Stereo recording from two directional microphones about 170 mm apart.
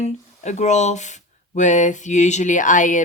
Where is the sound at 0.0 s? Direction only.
45° left (ahead or behind).